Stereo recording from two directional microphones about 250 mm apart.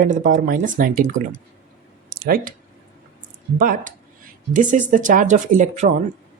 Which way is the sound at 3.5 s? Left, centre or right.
Right.